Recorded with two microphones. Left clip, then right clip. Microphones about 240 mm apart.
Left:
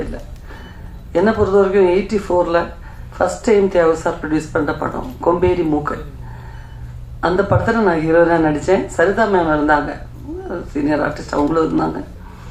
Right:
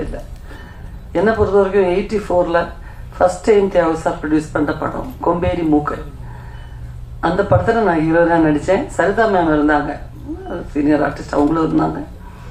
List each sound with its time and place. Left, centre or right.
1.1 s speech: left
7.2 s speech: left